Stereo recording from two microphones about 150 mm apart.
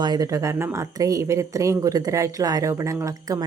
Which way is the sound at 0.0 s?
25° right (ahead or behind).